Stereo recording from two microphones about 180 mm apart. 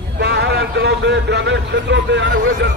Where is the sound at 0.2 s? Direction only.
65° right (ahead or behind).